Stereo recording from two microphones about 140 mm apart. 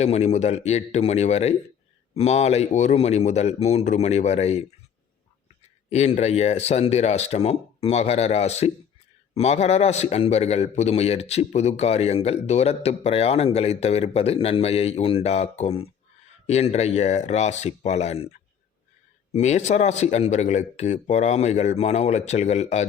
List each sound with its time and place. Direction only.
0.0 s a man's voice: 50° left (ahead or behind)
5.9 s a man's voice: 50° left (ahead or behind)